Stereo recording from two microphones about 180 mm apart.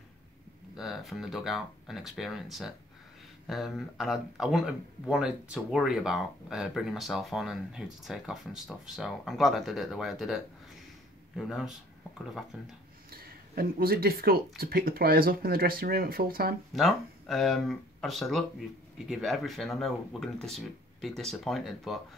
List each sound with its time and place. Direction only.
0.7 s speech: centre (ahead or behind)
13.1 s speech: 55° right (ahead or behind)
16.7 s speech: centre (ahead or behind)